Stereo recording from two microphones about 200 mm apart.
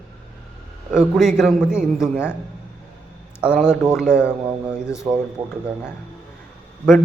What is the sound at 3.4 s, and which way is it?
Speech, 5° right (ahead or behind).